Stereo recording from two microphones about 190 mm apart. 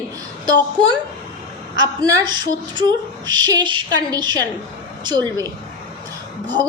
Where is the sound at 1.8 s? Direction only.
20° right (ahead or behind).